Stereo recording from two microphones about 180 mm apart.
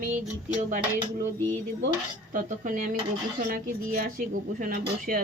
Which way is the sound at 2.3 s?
50° right (ahead or behind).